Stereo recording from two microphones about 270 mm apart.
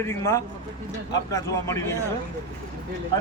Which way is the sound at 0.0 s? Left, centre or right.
Centre.